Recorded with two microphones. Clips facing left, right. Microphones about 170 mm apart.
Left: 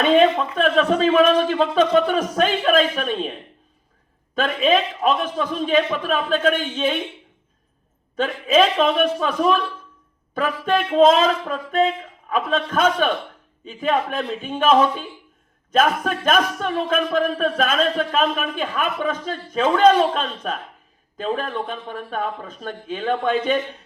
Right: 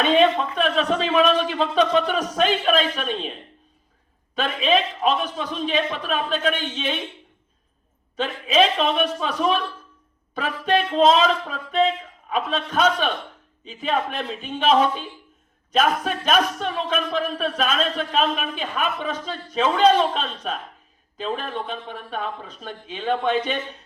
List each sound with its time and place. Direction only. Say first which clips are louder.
0.5 s speech: left 4 dB; 50° left (ahead or behind)
4.4 s speech: left 2 dB; 50° left (ahead or behind)
8.1 s speech: left 3 dB; 50° left (ahead or behind)